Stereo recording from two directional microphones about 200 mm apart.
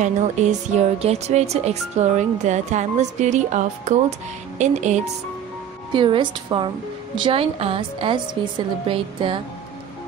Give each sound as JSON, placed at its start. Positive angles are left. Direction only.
{"t": 0.0, "sound": "speech", "side_deg": -35}
{"t": 5.9, "sound": "a woman's voice", "side_deg": -25}